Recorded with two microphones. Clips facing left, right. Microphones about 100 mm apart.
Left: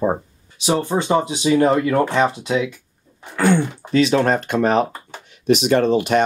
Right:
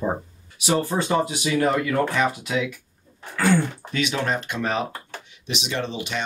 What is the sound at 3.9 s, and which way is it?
Speech, 35° left (ahead or behind).